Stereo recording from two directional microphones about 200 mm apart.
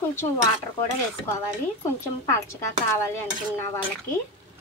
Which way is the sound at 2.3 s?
15° left (ahead or behind).